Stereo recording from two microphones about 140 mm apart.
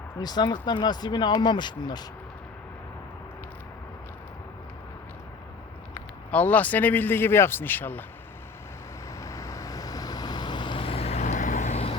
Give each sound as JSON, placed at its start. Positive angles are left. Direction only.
{"t": 0.2, "sound": "speech", "side_deg": 30}
{"t": 5.9, "sound": "speech", "side_deg": 10}
{"t": 9.2, "sound": "vehicle", "side_deg": 25}